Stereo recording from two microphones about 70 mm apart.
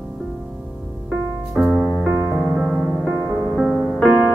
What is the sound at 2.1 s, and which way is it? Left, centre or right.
Music, right.